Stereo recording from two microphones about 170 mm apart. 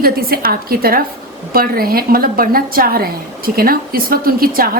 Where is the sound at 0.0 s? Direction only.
60° right (ahead or behind).